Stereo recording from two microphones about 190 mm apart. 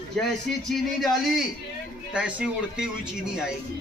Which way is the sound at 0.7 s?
Centre (ahead or behind).